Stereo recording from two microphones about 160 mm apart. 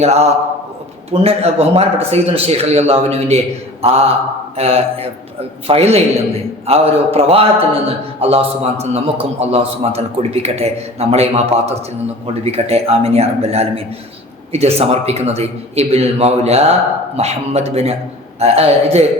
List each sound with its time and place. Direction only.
0.0 s a man's voice: 40° right (ahead or behind)